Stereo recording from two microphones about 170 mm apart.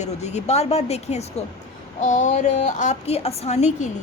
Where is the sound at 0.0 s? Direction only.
40° left (ahead or behind).